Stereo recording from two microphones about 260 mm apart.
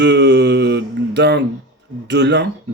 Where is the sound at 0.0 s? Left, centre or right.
Right.